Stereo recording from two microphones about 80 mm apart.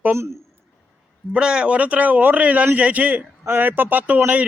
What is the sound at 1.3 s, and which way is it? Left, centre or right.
A man's voice, centre.